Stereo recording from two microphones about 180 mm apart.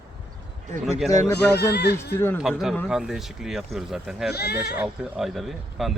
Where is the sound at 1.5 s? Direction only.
65° left (ahead or behind).